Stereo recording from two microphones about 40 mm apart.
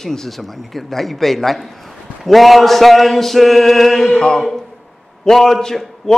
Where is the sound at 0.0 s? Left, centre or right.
Centre.